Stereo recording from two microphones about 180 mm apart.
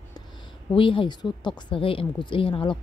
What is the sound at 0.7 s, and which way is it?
A woman's voice, 30° left (ahead or behind).